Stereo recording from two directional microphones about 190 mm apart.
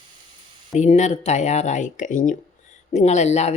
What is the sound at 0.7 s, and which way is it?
Speech, 35° left (ahead or behind).